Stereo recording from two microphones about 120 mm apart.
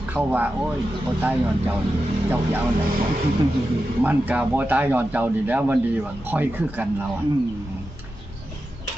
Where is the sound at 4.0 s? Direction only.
15° right (ahead or behind).